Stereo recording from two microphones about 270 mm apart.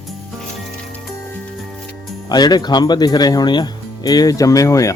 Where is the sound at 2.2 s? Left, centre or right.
Centre.